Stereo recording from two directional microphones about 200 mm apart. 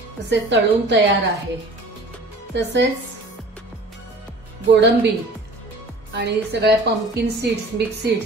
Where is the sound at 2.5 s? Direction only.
60° right (ahead or behind).